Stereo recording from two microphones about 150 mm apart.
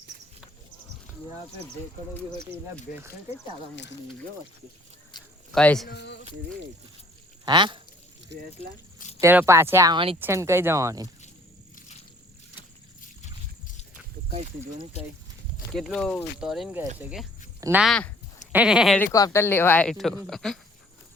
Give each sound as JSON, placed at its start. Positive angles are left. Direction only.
{"t": 5.5, "sound": "speech", "side_deg": 5}
{"t": 7.4, "sound": "speech", "side_deg": -30}
{"t": 9.0, "sound": "a sound", "side_deg": 50}
{"t": 9.2, "sound": "speech", "side_deg": -15}
{"t": 9.9, "sound": "speech", "side_deg": -35}
{"t": 10.2, "sound": "speech", "side_deg": -15}
{"t": 15.7, "sound": "speech", "side_deg": 0}
{"t": 19.1, "sound": "speech", "side_deg": 20}